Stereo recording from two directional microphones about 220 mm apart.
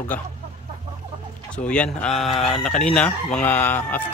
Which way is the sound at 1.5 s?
5° left (ahead or behind).